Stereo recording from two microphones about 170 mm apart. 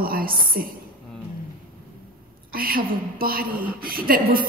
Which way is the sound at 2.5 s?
60° right (ahead or behind).